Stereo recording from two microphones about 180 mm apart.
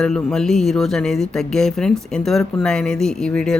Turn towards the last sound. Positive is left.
turn(degrees=5)  # may be behind; listen again after turning